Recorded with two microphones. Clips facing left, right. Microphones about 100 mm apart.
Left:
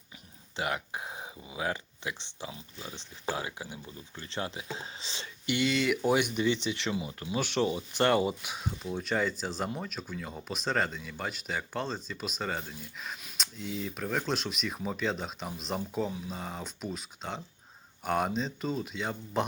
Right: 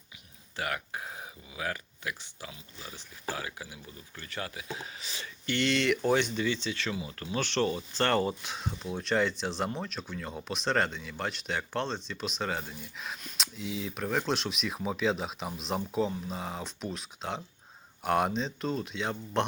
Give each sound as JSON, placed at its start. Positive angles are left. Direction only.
{"t": 0.5, "sound": "speech", "side_deg": 20}
{"t": 5.5, "sound": "speech", "side_deg": 5}